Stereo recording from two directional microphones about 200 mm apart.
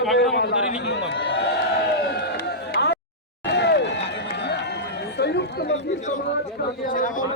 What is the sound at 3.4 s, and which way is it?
Run, 60° left (ahead or behind).